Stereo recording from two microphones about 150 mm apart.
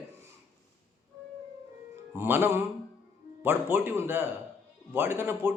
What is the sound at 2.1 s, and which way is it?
A man's voice, 15° right (ahead or behind).